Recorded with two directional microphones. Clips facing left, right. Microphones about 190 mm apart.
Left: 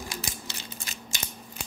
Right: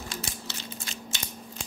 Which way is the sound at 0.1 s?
15° left (ahead or behind).